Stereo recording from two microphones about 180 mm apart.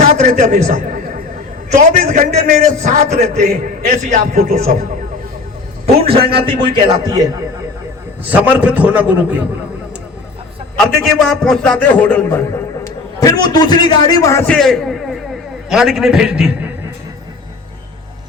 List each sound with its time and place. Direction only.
0.2 s a man's voice: 45° right (ahead or behind)
6.1 s speech: 30° right (ahead or behind)
8.2 s a man's voice: 10° right (ahead or behind)
11.0 s a man's voice: centre (ahead or behind)
14.5 s a man's voice: centre (ahead or behind)